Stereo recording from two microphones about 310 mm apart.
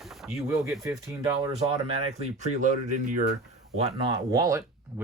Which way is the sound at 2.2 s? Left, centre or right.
Right.